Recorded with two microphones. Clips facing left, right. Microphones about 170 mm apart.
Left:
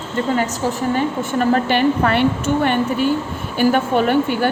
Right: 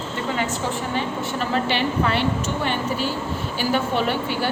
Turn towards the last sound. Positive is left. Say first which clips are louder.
# left 7 dB
turn(degrees=50)  # may be behind; listen again after turning